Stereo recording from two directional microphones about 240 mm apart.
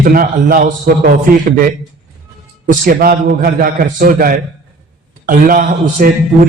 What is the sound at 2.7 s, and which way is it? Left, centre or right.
A man's voice, right.